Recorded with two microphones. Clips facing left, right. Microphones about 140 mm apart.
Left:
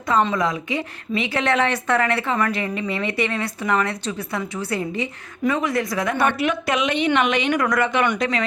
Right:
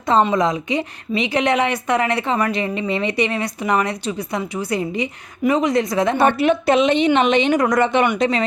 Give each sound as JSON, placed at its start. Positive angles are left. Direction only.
{"t": 0.0, "sound": "a woman's voice", "side_deg": -20}